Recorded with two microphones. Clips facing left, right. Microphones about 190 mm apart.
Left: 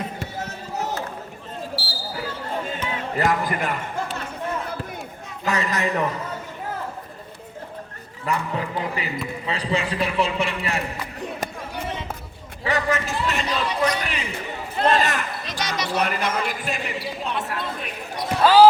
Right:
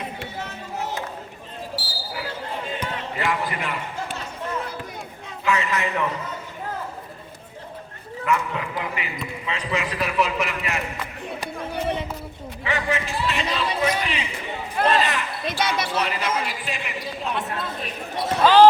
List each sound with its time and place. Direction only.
0.2 s run: 40° left (ahead or behind)
1.7 s basketball bounce: 30° left (ahead or behind)
3.2 s music: 45° left (ahead or behind)
5.5 s a man's voice: 40° left (ahead or behind)
8.2 s a man's voice: 35° left (ahead or behind)
12.6 s a sound: 40° left (ahead or behind)
15.4 s music: 55° right (ahead or behind)
16.0 s a man's voice: 50° left (ahead or behind)
18.4 s speech: 5° left (ahead or behind)